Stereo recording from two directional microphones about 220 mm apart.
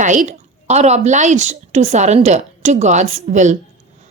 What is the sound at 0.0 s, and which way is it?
A woman's voice, 35° right (ahead or behind).